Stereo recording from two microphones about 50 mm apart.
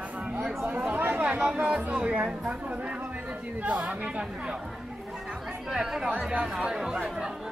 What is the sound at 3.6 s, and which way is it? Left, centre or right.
Speech, right.